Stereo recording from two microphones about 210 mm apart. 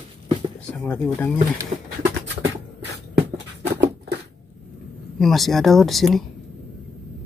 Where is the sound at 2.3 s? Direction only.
55° right (ahead or behind).